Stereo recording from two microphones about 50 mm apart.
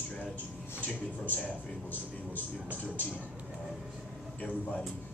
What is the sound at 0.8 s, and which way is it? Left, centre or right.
Speech, left.